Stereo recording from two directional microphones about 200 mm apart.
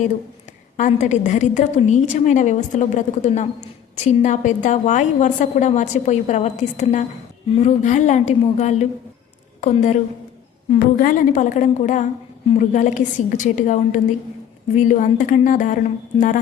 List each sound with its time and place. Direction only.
0.8 s a woman's voice: 35° left (ahead or behind)